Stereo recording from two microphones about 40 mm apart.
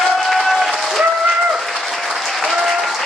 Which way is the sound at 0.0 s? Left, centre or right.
Centre.